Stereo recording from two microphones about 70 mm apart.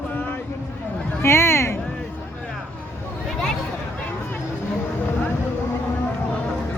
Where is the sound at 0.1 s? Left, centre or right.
Left.